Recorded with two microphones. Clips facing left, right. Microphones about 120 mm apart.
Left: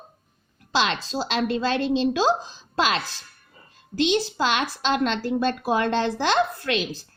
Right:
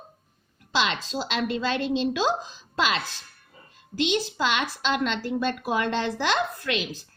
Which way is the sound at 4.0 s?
35° left (ahead or behind).